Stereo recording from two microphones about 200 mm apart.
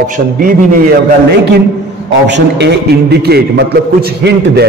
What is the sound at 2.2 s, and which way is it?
A man's voice, 60° right (ahead or behind).